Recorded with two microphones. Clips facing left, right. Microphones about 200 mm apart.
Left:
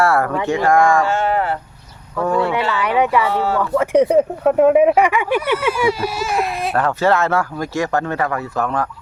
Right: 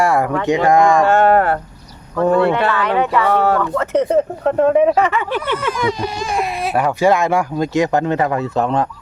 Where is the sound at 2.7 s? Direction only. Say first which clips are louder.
Even; 10° left (ahead or behind).